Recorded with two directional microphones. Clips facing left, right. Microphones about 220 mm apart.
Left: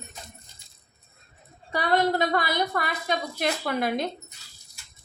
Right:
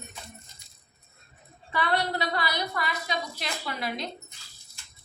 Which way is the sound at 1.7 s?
40° left (ahead or behind).